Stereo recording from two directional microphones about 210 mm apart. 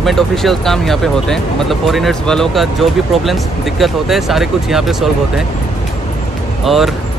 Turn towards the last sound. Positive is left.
turn(degrees=0)  # may be behind; listen again after turning